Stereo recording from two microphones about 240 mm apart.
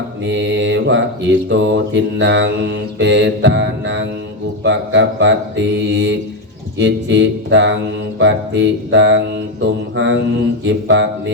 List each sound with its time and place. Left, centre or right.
0.3 s mantra: right